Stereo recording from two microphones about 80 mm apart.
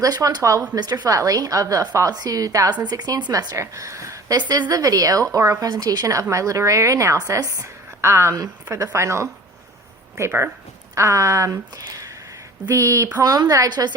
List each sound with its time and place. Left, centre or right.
0.0 s a woman's voice: right
5.6 s a woman's voice: right
12.6 s a woman's voice: right
13.1 s a woman's voice: right